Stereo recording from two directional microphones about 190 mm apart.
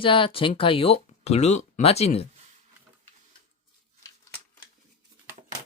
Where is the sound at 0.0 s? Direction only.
25° left (ahead or behind).